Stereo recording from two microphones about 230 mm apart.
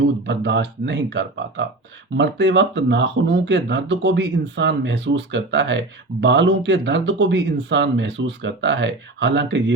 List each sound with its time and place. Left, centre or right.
0.3 s speech: right